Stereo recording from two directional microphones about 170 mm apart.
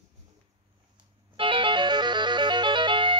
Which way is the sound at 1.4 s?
30° right (ahead or behind).